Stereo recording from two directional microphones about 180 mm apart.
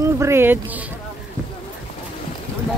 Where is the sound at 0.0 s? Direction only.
15° right (ahead or behind).